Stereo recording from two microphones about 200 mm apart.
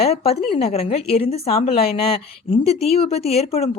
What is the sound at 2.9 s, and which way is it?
Speech, 30° left (ahead or behind).